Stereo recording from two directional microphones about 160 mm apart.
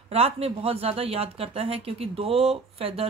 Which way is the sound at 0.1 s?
40° right (ahead or behind).